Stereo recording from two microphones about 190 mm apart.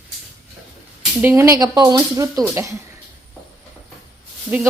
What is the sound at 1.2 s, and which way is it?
Speech, 10° right (ahead or behind).